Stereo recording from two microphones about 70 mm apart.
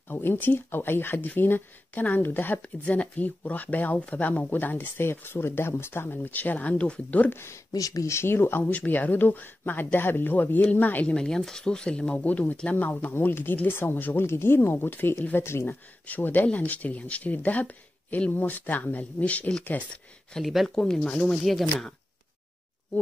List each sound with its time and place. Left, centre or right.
0.1 s speech: left
7.3 s speech: left
7.7 s speech: left
8.1 s speech: left
11.1 s speech: centre
20.3 s speech: centre